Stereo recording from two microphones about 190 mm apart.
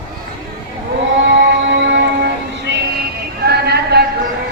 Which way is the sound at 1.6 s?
70° right (ahead or behind).